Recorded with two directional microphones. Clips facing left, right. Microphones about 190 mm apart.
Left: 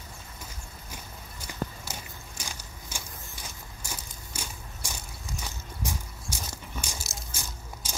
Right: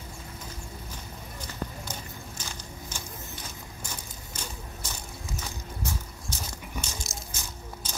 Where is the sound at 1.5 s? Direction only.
10° left (ahead or behind).